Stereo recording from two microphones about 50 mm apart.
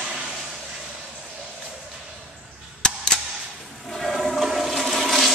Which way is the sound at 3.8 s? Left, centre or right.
Centre.